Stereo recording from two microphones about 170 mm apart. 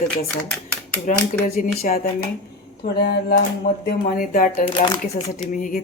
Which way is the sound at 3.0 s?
65° left (ahead or behind).